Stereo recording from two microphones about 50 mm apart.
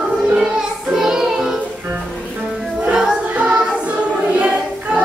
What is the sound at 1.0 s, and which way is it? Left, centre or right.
Music, centre.